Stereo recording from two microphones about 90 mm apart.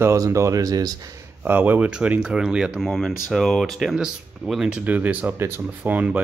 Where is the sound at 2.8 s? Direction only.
Centre (ahead or behind).